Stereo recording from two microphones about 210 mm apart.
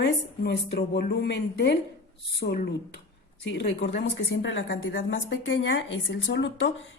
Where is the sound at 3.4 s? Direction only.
55° left (ahead or behind).